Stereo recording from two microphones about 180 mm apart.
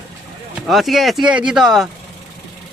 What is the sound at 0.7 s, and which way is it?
Speech, centre (ahead or behind).